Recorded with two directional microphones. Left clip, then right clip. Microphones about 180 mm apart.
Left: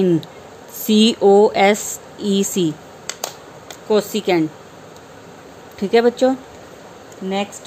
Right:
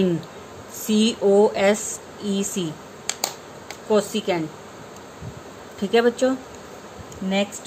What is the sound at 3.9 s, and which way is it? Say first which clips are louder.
Speech: left 4 dB; 35° left (ahead or behind).